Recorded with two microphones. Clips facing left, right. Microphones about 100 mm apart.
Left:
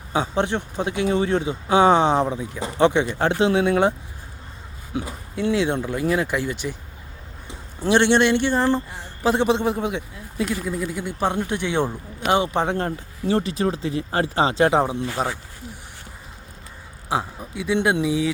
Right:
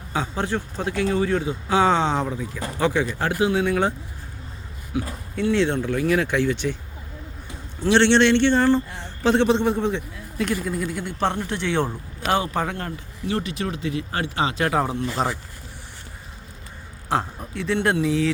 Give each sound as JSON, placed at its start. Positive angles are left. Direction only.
{"t": 0.1, "sound": "speech", "side_deg": 20}
{"t": 4.9, "sound": "a man's voice", "side_deg": 20}
{"t": 7.9, "sound": "a man's voice", "side_deg": 10}
{"t": 15.2, "sound": "speech", "side_deg": 5}
{"t": 17.1, "sound": "a man's voice", "side_deg": 10}